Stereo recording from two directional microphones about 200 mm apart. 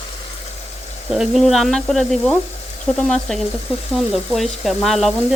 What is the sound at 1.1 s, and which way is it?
Frying, 5° right (ahead or behind).